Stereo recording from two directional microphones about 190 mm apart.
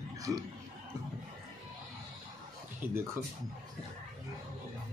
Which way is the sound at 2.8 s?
10° right (ahead or behind).